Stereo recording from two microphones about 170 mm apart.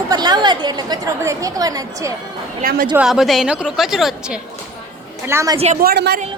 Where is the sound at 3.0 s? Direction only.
Centre (ahead or behind).